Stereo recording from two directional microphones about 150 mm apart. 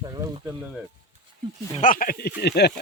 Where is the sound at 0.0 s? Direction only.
25° right (ahead or behind).